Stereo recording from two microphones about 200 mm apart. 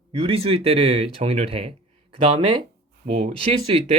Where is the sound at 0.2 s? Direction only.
30° right (ahead or behind).